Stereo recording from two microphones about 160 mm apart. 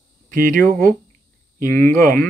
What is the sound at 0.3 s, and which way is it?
Speech, 60° right (ahead or behind).